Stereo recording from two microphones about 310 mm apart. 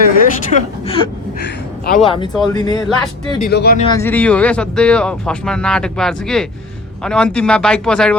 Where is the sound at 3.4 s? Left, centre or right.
Left.